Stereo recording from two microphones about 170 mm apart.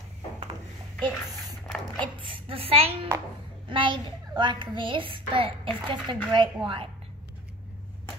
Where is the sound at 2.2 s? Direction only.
30° right (ahead or behind).